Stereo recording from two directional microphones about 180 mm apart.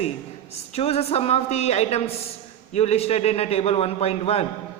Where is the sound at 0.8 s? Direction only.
35° left (ahead or behind).